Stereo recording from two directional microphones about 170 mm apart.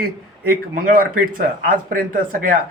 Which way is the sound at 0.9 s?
55° right (ahead or behind).